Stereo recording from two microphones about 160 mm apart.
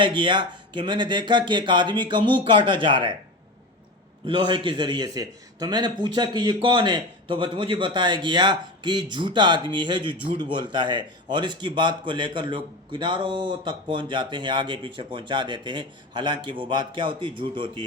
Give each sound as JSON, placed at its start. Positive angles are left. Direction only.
{"t": 0.0, "sound": "a man's voice", "side_deg": -30}
{"t": 4.3, "sound": "a man's voice", "side_deg": -30}